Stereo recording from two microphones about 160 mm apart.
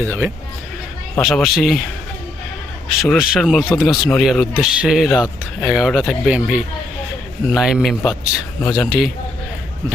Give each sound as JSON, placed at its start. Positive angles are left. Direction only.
{"t": 0.0, "sound": "speech", "side_deg": -15}
{"t": 1.2, "sound": "speech", "side_deg": 0}
{"t": 3.0, "sound": "speech", "side_deg": 0}